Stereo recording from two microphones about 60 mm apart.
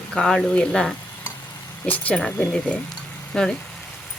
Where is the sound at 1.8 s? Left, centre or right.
Left.